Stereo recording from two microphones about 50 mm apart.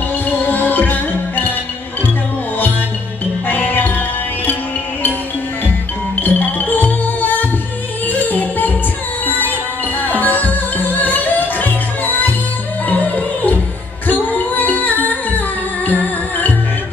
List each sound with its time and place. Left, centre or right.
0.5 s music: left
3.4 s music: left
6.2 s music: left